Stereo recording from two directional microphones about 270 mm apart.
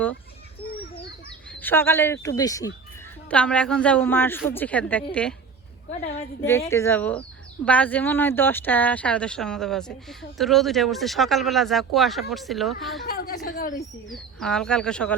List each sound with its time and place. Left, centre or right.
1.5 s speech: centre
6.7 s speech: centre
13.1 s a woman's voice: left
14.1 s speech: centre